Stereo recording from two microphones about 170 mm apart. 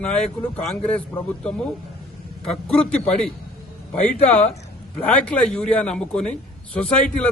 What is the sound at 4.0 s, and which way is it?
Speech, 40° left (ahead or behind).